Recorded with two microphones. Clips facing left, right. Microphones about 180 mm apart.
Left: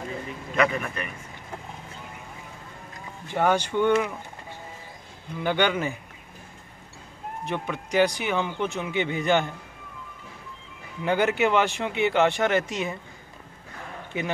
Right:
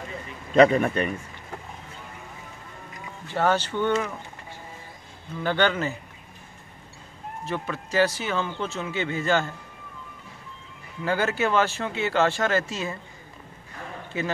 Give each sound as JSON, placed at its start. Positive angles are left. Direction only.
{"t": 0.6, "sound": "speech", "side_deg": -30}
{"t": 3.3, "sound": "speech", "side_deg": 15}
{"t": 5.3, "sound": "speech", "side_deg": 15}
{"t": 7.4, "sound": "speech", "side_deg": 20}
{"t": 11.1, "sound": "speech", "side_deg": 15}